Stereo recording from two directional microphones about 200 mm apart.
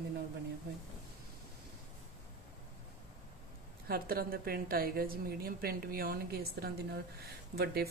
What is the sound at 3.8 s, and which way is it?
A woman's voice, 50° right (ahead or behind).